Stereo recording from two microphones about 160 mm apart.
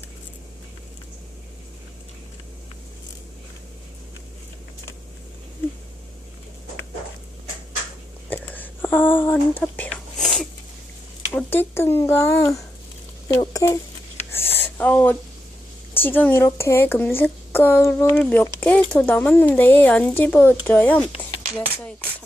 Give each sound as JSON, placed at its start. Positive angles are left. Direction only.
{"t": 8.3, "sound": "a sound", "side_deg": 10}
{"t": 11.3, "sound": "speech", "side_deg": 15}
{"t": 13.2, "sound": "speech", "side_deg": 25}
{"t": 14.8, "sound": "a woman's voice", "side_deg": 10}